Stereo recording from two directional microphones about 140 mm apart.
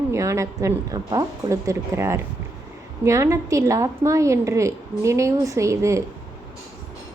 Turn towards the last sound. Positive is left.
turn(degrees=-20)  # may be behind; listen again after turning